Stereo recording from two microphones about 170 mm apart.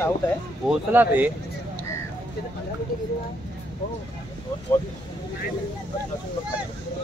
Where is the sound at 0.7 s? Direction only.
10° right (ahead or behind).